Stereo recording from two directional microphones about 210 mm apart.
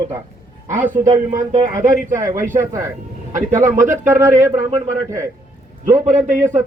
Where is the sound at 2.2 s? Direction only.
10° right (ahead or behind).